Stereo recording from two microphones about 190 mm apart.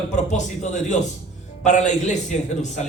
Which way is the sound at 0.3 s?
40° left (ahead or behind).